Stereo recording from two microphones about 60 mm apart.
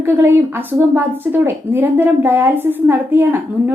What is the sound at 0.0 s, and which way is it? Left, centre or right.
A woman's voice, right.